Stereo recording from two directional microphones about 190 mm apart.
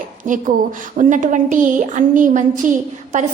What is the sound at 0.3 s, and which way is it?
A woman's voice, 45° right (ahead or behind).